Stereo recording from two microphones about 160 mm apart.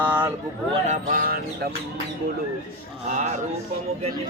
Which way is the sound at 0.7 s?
50° right (ahead or behind).